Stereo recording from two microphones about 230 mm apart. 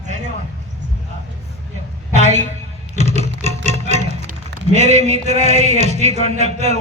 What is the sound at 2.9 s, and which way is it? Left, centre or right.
Music, right.